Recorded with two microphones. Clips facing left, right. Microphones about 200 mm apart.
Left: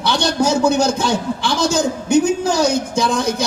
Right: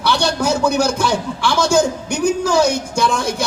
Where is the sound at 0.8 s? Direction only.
20° left (ahead or behind).